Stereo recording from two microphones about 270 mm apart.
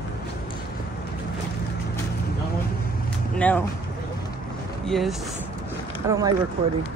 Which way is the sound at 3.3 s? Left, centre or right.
Centre.